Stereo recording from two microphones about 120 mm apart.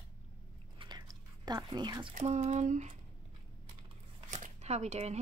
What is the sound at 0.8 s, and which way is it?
Chewing, 35° right (ahead or behind).